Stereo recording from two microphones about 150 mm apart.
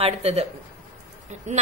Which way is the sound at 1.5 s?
55° right (ahead or behind).